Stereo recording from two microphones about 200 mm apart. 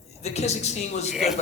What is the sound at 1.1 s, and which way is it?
Speech, centre (ahead or behind).